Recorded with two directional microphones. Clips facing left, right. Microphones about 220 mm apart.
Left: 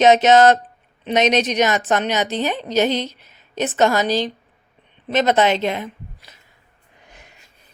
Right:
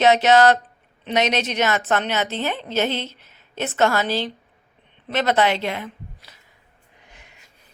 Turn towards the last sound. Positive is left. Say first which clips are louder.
# left 3 dB
turn(degrees=20)  # may be behind; listen again after turning